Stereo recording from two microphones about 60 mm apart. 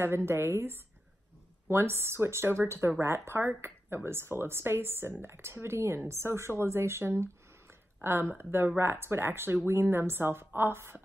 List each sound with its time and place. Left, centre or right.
0.0 s speech: right